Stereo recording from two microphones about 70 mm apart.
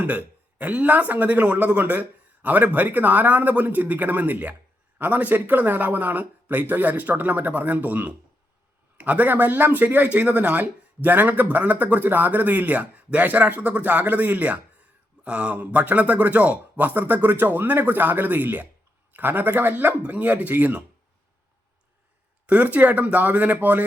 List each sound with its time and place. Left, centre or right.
0.0 s speech: right
22.4 s speech: right